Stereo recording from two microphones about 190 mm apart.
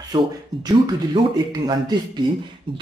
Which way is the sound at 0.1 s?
20° right (ahead or behind).